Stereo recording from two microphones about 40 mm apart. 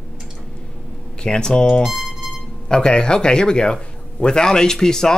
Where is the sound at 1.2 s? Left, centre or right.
Centre.